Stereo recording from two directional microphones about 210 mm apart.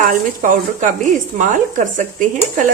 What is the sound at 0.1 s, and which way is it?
Speech, 35° right (ahead or behind).